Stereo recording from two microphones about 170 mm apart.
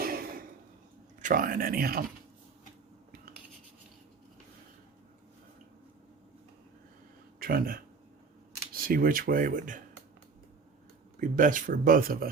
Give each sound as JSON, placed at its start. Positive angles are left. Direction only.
{"t": 0.0, "sound": "a sound", "side_deg": -60}
{"t": 1.2, "sound": "speech", "side_deg": -55}
{"t": 7.3, "sound": "speech", "side_deg": -60}
{"t": 11.2, "sound": "speech", "side_deg": -50}